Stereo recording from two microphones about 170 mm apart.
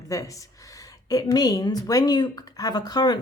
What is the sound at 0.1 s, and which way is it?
A woman's voice, 20° left (ahead or behind).